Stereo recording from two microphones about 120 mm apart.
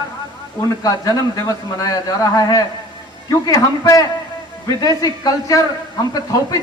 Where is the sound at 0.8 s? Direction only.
30° left (ahead or behind).